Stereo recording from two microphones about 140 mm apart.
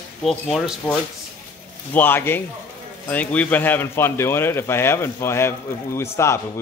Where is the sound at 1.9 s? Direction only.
15° left (ahead or behind).